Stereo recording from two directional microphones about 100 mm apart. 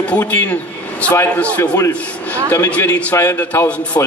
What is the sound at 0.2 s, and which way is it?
Speech, 20° left (ahead or behind).